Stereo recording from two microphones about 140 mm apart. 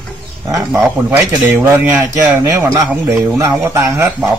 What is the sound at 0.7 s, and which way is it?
A man's voice, 20° right (ahead or behind).